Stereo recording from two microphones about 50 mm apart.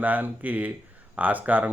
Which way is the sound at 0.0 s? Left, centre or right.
Right.